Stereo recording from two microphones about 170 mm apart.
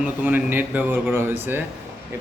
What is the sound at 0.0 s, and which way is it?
A man's voice, 10° right (ahead or behind).